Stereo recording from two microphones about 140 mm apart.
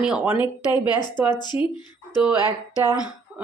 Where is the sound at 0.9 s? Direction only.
30° left (ahead or behind).